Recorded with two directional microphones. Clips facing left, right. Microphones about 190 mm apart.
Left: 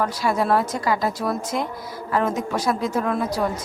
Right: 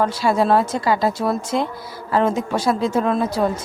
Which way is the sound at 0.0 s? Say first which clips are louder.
Right 4 dB; 25° right (ahead or behind).